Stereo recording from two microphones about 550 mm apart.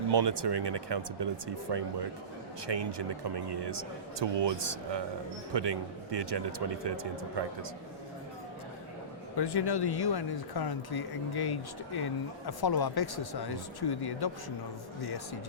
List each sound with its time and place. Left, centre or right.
0.1 s speech: right
9.4 s speech: left